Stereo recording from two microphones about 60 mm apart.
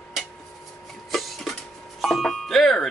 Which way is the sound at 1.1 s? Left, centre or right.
Centre.